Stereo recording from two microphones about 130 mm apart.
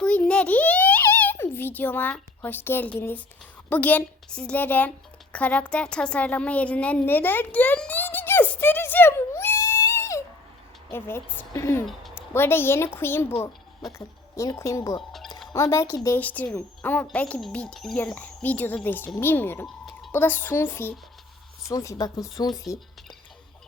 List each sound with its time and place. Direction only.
0.0 s a sound: 10° left (ahead or behind)
3.7 s a woman's voice: 10° left (ahead or behind)
14.3 s speech: 25° left (ahead or behind)
15.1 s music: centre (ahead or behind)
15.5 s speech: 25° left (ahead or behind)
16.0 s speech: 15° left (ahead or behind)
19.6 s a sound: centre (ahead or behind)
20.1 s speech: 15° left (ahead or behind)